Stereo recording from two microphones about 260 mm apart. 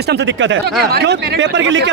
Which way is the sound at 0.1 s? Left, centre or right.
Right.